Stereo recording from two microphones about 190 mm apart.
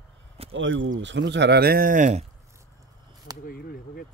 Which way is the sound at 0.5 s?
80° right.